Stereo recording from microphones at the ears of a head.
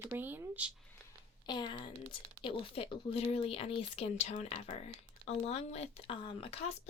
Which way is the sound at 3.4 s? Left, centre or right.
Left.